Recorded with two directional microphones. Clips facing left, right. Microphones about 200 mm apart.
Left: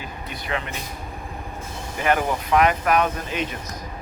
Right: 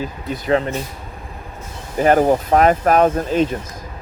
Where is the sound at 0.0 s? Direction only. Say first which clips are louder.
Right 9 dB; 35° right (ahead or behind).